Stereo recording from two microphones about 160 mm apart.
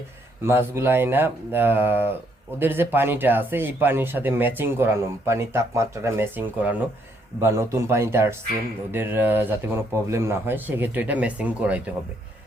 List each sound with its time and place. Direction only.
0.4 s speech: 15° right (ahead or behind)